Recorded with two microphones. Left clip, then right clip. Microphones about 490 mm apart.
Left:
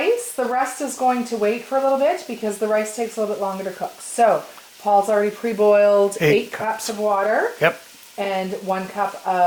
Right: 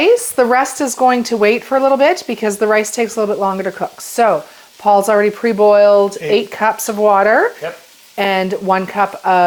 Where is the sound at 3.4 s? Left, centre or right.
Right.